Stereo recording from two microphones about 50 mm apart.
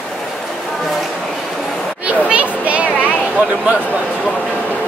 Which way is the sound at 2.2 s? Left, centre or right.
Right.